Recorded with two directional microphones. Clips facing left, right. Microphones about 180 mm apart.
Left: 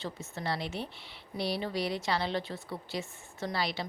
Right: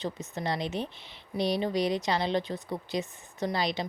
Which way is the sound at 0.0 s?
20° right (ahead or behind).